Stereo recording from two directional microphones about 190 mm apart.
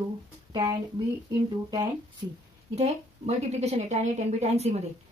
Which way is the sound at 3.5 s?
35° right (ahead or behind).